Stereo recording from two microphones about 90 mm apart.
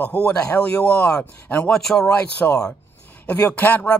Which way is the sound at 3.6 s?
20° left (ahead or behind).